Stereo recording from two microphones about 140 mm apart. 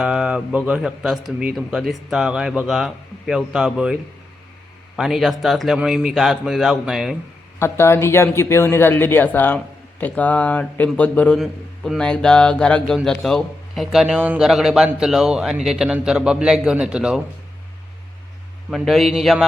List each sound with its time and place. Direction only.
0.0 s speech: 5° right (ahead or behind)
4.9 s speech: centre (ahead or behind)
7.6 s speech: 20° left (ahead or behind); by 17.2 s 5° right (ahead or behind)
18.7 s speech: centre (ahead or behind)